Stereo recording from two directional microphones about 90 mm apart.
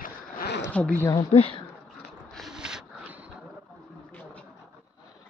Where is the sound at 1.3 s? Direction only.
90° left.